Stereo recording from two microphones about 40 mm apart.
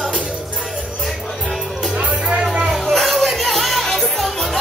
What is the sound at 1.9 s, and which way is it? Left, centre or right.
Music, centre.